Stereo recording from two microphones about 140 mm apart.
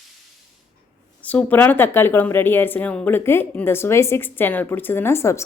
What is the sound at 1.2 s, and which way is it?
Speech, 10° left (ahead or behind).